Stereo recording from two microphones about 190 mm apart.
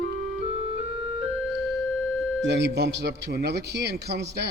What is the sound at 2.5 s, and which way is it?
A man's voice, 60° right (ahead or behind).